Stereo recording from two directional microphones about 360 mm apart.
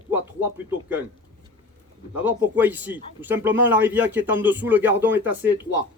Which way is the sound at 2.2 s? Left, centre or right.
Centre.